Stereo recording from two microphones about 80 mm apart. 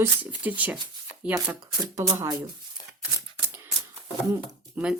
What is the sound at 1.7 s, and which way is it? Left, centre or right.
Speech, right.